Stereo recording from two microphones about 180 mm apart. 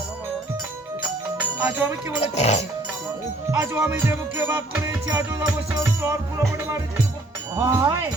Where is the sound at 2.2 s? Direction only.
35° left (ahead or behind).